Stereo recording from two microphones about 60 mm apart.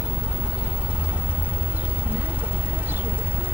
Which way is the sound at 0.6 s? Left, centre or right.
Right.